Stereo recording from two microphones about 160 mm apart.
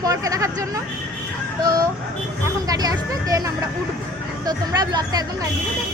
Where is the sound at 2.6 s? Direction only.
25° right (ahead or behind).